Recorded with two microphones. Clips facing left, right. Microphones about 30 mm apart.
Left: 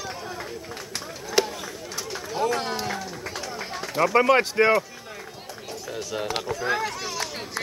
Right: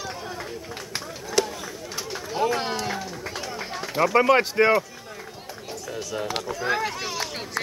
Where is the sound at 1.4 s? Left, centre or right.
Centre.